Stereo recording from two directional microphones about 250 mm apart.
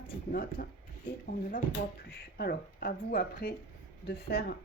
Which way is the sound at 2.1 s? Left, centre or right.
Left.